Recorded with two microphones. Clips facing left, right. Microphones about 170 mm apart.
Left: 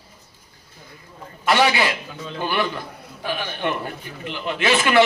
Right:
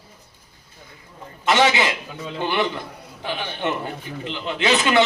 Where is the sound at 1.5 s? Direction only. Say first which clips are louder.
Even; 20° right (ahead or behind).